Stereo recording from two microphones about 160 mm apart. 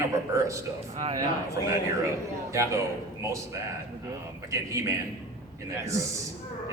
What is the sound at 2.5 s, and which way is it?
Speech, 20° right (ahead or behind).